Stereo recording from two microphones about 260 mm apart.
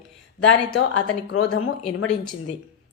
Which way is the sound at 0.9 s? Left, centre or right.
Left.